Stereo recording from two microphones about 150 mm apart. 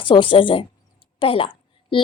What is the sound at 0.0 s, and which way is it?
Speech, 35° left (ahead or behind).